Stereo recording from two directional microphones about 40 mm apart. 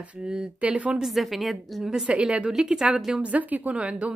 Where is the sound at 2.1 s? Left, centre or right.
Right.